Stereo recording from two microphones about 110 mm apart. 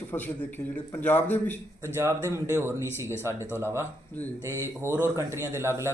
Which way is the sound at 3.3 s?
20° left (ahead or behind).